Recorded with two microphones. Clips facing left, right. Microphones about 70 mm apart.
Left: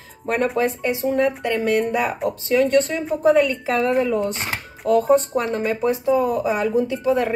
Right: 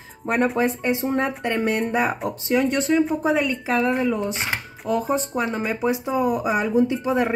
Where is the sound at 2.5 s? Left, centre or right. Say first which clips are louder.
Left 2 dB; centre.